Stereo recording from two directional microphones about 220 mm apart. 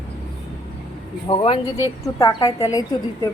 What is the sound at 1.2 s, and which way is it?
A woman's voice, 25° left (ahead or behind).